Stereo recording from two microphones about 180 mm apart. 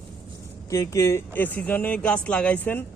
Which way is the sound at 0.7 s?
15° left (ahead or behind).